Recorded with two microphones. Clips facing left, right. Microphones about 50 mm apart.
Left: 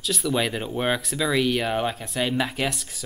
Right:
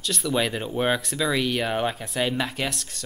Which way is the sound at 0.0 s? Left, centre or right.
Centre.